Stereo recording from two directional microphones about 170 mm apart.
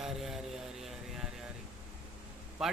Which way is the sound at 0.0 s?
Centre (ahead or behind).